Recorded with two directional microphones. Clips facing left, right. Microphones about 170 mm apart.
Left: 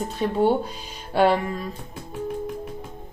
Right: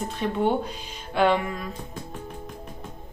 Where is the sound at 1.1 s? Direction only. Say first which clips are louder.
Left 2 dB; 35° left (ahead or behind).